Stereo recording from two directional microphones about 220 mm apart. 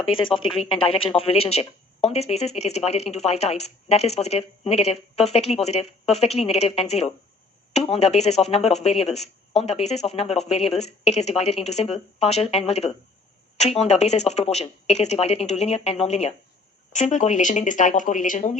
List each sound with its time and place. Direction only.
0.0 s speech: 25° left (ahead or behind)